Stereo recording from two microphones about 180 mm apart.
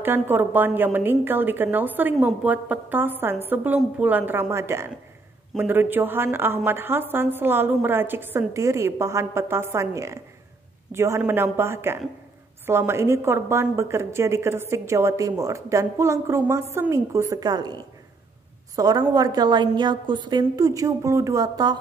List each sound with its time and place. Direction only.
0.0 s a woman's voice: 10° right (ahead or behind)